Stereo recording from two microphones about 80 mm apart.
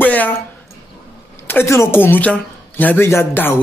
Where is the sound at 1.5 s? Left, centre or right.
Left.